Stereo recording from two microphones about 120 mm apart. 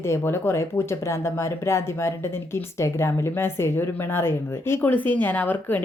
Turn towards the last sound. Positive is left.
turn(degrees=15)  # may be behind; listen again after turning